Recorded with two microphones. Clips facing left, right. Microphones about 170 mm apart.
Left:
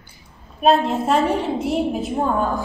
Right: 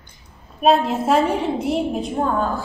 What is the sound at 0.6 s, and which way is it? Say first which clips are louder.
A woman's voice: even; centre (ahead or behind).